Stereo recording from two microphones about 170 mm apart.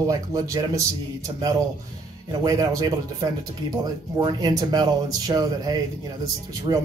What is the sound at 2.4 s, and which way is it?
Speech, 20° right (ahead or behind).